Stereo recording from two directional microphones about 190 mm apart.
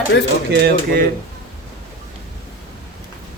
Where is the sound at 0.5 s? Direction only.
60° right (ahead or behind).